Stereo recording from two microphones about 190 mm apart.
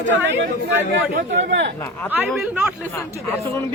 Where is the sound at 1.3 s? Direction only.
65° right (ahead or behind).